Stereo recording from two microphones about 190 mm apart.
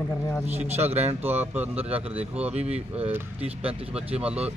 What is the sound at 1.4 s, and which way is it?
Speech, 10° right (ahead or behind).